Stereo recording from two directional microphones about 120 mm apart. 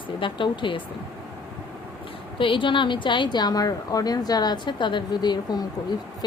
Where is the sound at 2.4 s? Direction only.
45° left (ahead or behind).